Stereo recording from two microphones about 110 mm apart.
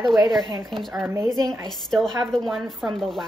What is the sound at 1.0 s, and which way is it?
Speech, 25° right (ahead or behind).